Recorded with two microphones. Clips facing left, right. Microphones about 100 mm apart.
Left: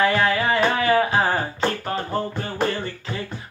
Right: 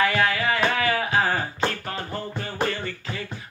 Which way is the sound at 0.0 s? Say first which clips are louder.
Left 3 dB; 30° left (ahead or behind).